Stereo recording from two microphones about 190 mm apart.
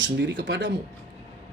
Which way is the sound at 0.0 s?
75° right (ahead or behind).